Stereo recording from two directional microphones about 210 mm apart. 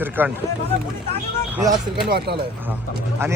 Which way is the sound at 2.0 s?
50° right (ahead or behind).